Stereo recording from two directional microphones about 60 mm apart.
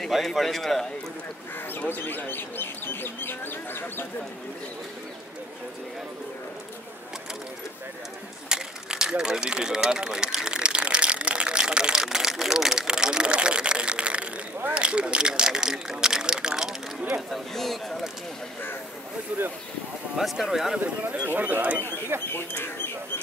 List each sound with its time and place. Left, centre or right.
0.0 s speech: centre
1.7 s speech: left
8.5 s speech: centre
17.3 s speech: centre
20.2 s speech: centre
20.8 s speech: right
22.1 s speech: right